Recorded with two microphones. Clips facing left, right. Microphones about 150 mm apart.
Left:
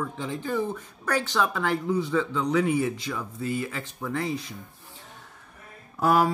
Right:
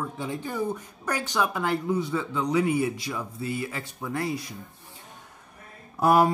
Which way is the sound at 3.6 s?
10° right (ahead or behind).